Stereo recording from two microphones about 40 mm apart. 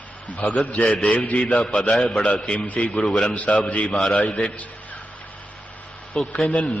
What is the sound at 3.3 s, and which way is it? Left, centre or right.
A man's voice, left.